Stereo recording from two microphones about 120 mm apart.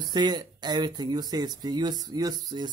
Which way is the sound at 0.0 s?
35° right (ahead or behind).